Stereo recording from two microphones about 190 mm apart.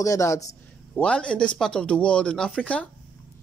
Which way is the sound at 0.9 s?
5° left (ahead or behind).